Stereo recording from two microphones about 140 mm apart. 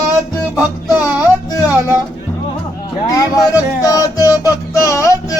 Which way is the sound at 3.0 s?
25° left (ahead or behind).